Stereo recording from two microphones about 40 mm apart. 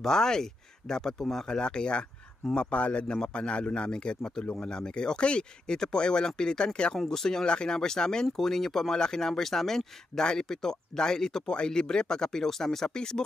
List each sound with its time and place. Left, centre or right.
0.0 s speech: centre
1.6 s speech: left